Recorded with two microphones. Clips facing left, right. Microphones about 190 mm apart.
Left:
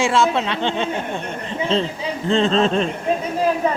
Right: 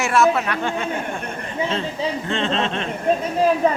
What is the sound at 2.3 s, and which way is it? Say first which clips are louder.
Speech: left 9 dB; 35° left (ahead or behind).